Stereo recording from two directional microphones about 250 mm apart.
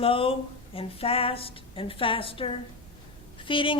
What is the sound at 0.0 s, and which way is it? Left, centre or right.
A woman's voice, left.